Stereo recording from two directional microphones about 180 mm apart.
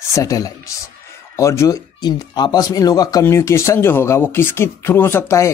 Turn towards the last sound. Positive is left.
turn(degrees=15)  # may be behind; listen again after turning